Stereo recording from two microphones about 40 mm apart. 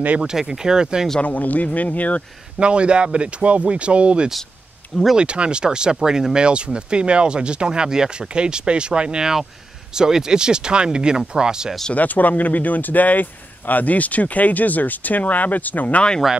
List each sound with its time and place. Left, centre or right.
0.2 s speech: centre
1.2 s speech: left
2.6 s speech: right
11.9 s speech: left